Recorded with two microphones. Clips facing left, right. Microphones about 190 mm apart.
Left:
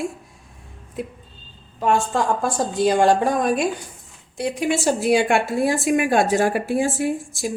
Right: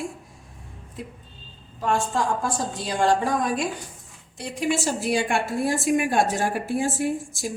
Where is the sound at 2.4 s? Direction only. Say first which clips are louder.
Left 8 dB; 60° left (ahead or behind).